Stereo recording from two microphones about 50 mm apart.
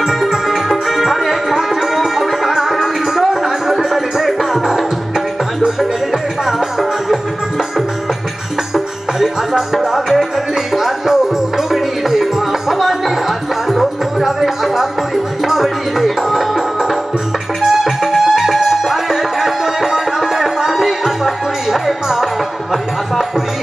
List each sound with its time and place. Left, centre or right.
0.0 s music: centre
6.4 s music: centre
8.7 s music: centre